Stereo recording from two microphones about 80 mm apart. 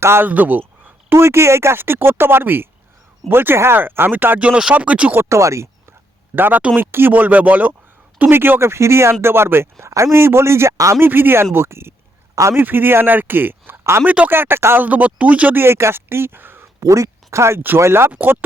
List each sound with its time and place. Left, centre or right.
0.0 s speech: right
0.3 s speech: right
5.1 s speech: right
6.3 s speech: right
11.0 s speech: right
11.5 s a sound: right
12.5 s speech: right
14.8 s speech: centre
15.6 s speech: right
16.8 s speech: right
18.1 s speech: right